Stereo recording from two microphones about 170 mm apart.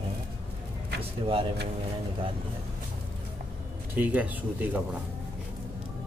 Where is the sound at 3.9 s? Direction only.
10° right (ahead or behind).